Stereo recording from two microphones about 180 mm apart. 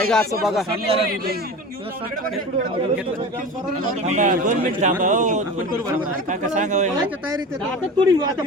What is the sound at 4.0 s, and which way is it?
Speech, 40° right (ahead or behind).